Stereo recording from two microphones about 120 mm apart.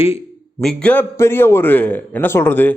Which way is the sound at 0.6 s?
5° left (ahead or behind).